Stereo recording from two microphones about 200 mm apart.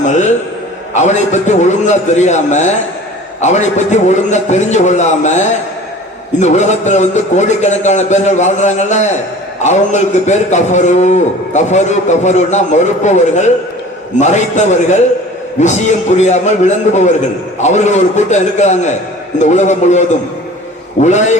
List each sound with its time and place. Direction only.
0.0 s a man's voice: 35° left (ahead or behind)